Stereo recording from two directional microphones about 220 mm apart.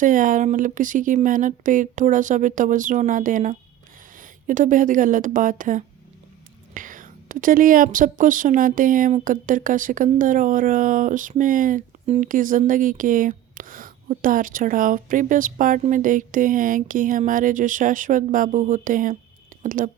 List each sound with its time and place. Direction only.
0.0 s a woman's voice: 35° right (ahead or behind)